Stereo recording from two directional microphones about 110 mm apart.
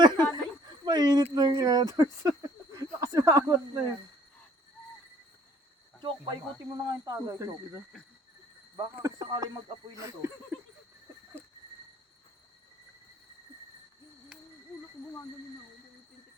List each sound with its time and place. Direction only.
0.1 s a sound: 20° left (ahead or behind)
0.9 s speech: 40° right (ahead or behind)
2.7 s a sound: 30° right (ahead or behind)
6.0 s speech: 45° right (ahead or behind)
6.8 s cricket: 35° right (ahead or behind)
8.7 s speech: 30° right (ahead or behind)
9.9 s cricket: 30° right (ahead or behind)